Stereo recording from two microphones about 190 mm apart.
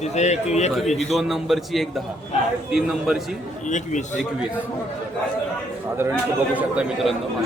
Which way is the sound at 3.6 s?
40° left (ahead or behind).